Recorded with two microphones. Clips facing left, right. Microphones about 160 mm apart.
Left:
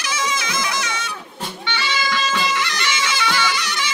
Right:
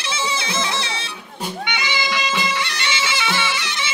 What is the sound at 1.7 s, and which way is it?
Music, 15° right (ahead or behind).